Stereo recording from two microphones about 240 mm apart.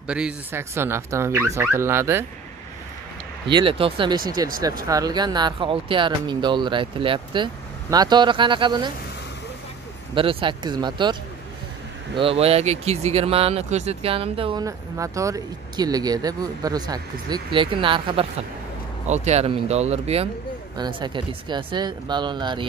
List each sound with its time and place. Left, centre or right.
0.1 s speech: centre
3.4 s speech: centre
10.1 s speech: right
12.2 s speech: right